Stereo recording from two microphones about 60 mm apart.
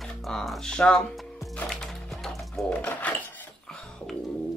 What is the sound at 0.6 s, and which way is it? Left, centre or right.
Speech, centre.